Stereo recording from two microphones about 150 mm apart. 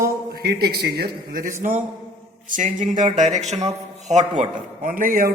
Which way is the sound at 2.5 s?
60° right (ahead or behind).